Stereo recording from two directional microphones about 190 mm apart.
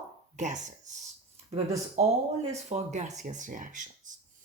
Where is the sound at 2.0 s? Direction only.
40° right (ahead or behind).